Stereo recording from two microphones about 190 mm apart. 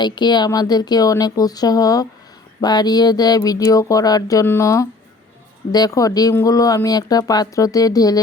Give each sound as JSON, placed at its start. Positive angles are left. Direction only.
{"t": 0.0, "sound": "speech", "side_deg": 25}